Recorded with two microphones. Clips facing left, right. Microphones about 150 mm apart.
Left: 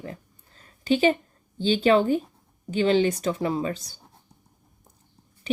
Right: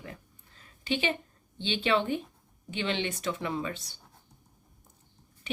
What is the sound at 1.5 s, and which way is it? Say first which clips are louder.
Speech: left 8 dB; 40° left (ahead or behind).